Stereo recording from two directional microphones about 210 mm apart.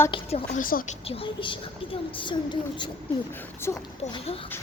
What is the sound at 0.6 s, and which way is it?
Speech, 40° left (ahead or behind).